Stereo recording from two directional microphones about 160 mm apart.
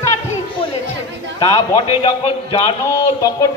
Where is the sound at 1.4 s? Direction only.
20° left (ahead or behind).